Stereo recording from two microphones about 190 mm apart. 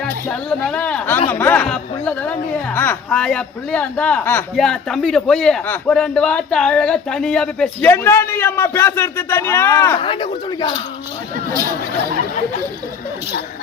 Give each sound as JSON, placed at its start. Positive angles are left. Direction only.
{"t": 0.0, "sound": "speech", "side_deg": 5}
{"t": 10.0, "sound": "speech", "side_deg": 25}